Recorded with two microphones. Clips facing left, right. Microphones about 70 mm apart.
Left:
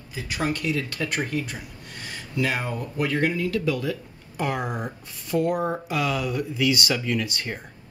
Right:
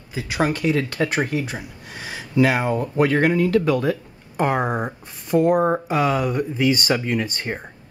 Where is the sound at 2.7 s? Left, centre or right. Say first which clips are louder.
Right 7 dB; right.